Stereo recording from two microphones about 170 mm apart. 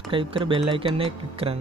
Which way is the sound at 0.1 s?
30° right (ahead or behind).